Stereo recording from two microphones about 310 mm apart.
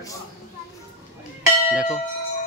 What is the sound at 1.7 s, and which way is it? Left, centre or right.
Bell, centre.